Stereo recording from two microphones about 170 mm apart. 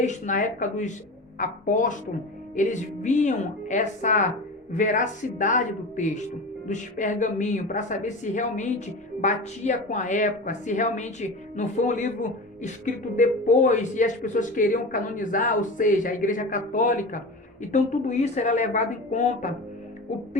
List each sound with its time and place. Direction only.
0.0 s a woman's voice: 45° left (ahead or behind)